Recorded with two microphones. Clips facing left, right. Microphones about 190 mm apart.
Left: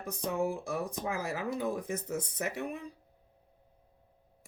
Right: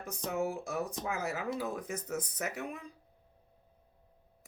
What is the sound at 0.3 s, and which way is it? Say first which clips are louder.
Speech: left 1 dB; 30° left (ahead or behind).